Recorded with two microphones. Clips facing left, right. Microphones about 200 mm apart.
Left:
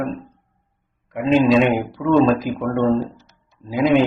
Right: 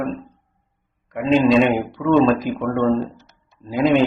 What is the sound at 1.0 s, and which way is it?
A man's voice, 5° left (ahead or behind).